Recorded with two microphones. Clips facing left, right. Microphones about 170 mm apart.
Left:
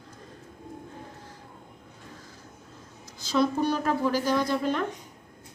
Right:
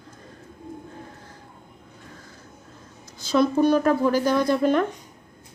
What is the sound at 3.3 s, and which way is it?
Speech, 55° right (ahead or behind).